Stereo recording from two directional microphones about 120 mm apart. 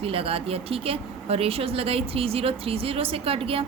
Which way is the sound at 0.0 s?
50° right (ahead or behind).